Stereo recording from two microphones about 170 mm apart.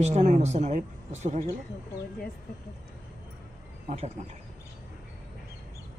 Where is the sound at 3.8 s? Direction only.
40° right (ahead or behind).